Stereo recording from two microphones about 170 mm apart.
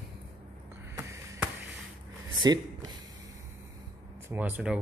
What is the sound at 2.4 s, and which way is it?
Speech, 25° right (ahead or behind).